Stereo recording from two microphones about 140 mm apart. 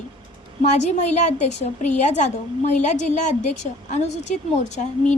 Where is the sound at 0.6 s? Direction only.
55° left (ahead or behind).